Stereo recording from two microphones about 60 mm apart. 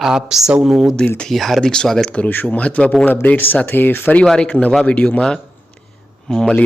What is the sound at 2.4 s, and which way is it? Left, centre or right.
Speech, centre.